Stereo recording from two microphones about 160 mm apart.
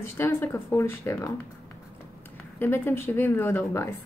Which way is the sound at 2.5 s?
15° left (ahead or behind).